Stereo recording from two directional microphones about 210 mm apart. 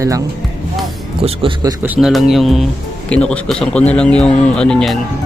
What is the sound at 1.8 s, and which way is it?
A man's voice, 5° right (ahead or behind).